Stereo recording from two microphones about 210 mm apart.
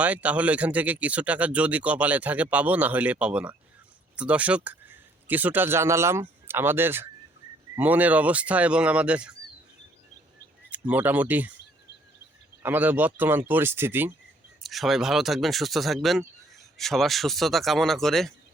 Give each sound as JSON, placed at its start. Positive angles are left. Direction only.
{"t": 0.0, "sound": "speech", "side_deg": -5}
{"t": 10.7, "sound": "speech", "side_deg": -5}
{"t": 12.6, "sound": "speech", "side_deg": -10}